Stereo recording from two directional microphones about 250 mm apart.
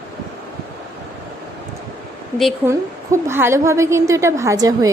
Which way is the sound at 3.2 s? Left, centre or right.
Centre.